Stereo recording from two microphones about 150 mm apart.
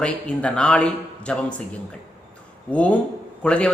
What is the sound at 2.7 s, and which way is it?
A man's voice, 10° left (ahead or behind).